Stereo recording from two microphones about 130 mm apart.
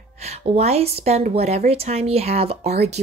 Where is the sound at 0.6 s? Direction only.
55° right (ahead or behind).